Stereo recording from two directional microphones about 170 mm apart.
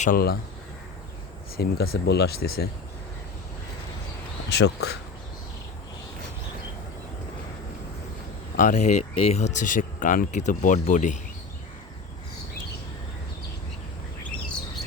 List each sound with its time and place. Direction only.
0.0 s speech: 60° left (ahead or behind)
1.5 s speech: 65° left (ahead or behind)
4.5 s speech: 80° left
8.5 s speech: 45° left (ahead or behind)